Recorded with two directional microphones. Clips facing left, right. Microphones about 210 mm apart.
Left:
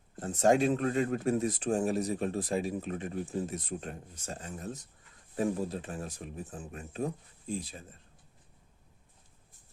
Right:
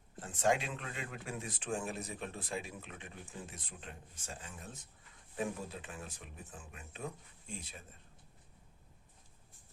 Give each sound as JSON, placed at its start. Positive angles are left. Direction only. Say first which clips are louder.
{"t": 0.2, "sound": "speech", "louder": "left 8 dB", "side_deg": 40}